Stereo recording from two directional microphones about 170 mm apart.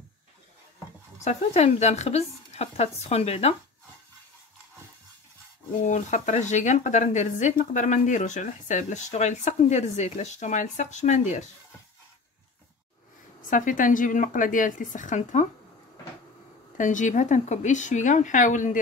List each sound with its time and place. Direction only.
1.2 s a woman's voice: 40° left (ahead or behind)
5.9 s speech: 45° left (ahead or behind)
13.5 s speech: 50° left (ahead or behind)
16.7 s speech: 50° left (ahead or behind)